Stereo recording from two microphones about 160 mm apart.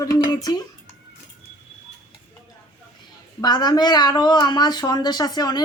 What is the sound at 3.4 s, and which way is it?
A woman's voice, 25° left (ahead or behind).